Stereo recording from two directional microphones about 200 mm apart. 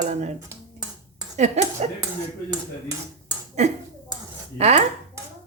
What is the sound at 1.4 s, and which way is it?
Speech, 35° right (ahead or behind).